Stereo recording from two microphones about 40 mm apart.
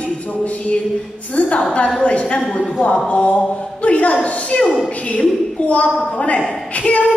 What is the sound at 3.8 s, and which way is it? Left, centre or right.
Speech, left.